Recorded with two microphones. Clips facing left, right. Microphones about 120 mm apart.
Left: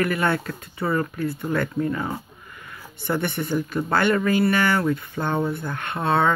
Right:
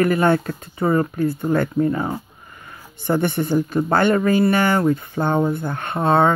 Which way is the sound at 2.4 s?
35° right (ahead or behind).